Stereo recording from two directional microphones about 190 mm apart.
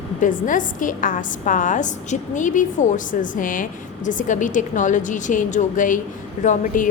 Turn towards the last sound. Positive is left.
turn(degrees=40)  # may be behind; listen again after turning